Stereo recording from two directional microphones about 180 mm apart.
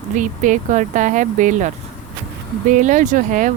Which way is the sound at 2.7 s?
45° right (ahead or behind).